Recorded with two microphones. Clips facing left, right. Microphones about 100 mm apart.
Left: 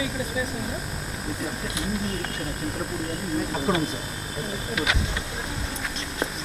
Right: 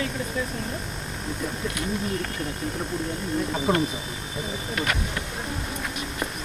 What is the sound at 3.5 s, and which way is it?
Speech, centre (ahead or behind).